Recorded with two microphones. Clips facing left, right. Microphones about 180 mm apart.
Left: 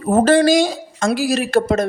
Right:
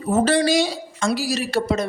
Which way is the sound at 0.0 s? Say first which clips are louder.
Left 5 dB; 55° left (ahead or behind).